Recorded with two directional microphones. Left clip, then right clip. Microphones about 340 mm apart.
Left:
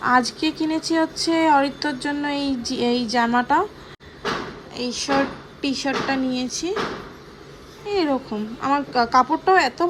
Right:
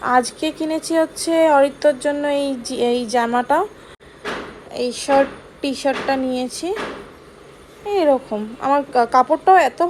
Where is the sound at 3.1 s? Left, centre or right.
Centre.